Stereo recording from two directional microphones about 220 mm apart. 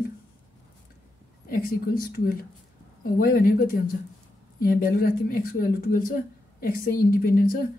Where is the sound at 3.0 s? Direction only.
40° left (ahead or behind).